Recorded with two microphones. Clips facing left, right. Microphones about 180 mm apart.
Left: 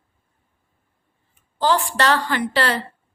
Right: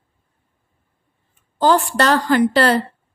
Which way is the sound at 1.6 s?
45° right (ahead or behind).